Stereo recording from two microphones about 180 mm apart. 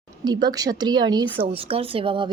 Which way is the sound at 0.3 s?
25° right (ahead or behind).